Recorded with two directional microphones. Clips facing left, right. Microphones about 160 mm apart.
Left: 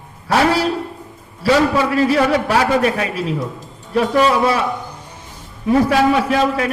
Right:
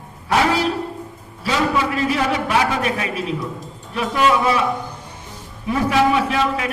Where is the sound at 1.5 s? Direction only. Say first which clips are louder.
Left 5 dB; 40° left (ahead or behind).